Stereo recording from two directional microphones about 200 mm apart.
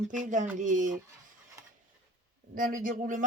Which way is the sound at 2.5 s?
45° right (ahead or behind).